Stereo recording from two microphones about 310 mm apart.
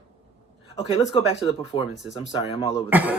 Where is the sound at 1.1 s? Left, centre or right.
Centre.